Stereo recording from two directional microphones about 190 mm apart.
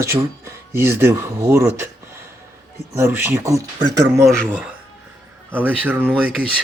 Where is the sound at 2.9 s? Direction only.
15° right (ahead or behind).